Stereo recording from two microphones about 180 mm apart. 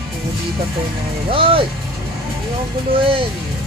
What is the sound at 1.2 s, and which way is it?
Speech, 30° right (ahead or behind).